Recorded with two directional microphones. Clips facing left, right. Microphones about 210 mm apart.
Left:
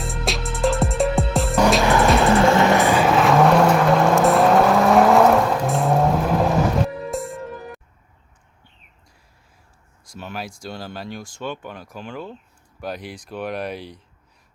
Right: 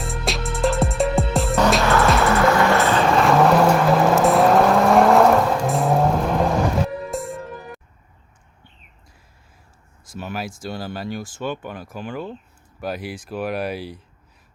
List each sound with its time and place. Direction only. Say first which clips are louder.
0.0 s music: even; centre (ahead or behind)
1.8 s music: left 1 dB; 15° left (ahead or behind)
2.3 s vehicle: left 1 dB; 25° left (ahead or behind); by 7.8 s centre (ahead or behind)
10.1 s a sound: right 3 dB; 5° right (ahead or behind)
10.6 s speech: right 3 dB; 5° right (ahead or behind)